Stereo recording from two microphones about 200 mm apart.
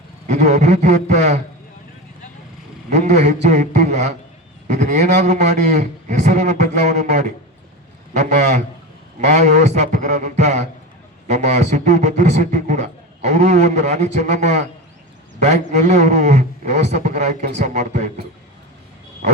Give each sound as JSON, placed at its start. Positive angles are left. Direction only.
{"t": 0.3, "sound": "a man's voice", "side_deg": -35}
{"t": 2.9, "sound": "a man's voice", "side_deg": -35}